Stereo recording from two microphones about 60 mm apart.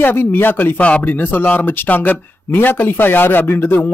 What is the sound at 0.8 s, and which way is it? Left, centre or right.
Speech, left.